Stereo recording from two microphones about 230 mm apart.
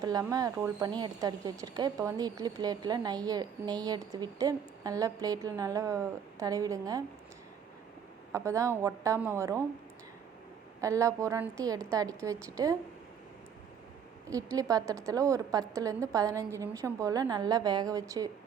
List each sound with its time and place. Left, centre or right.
0.0 s speech: centre
8.3 s speech: centre
10.8 s speech: centre
14.3 s speech: centre